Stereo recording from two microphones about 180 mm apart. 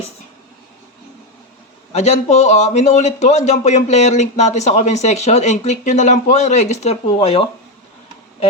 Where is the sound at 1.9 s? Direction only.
40° left (ahead or behind).